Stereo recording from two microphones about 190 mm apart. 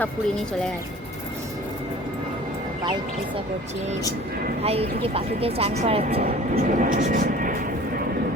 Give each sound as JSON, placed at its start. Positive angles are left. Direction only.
{"t": 4.6, "sound": "speech", "side_deg": -30}
{"t": 6.6, "sound": "speech", "side_deg": -45}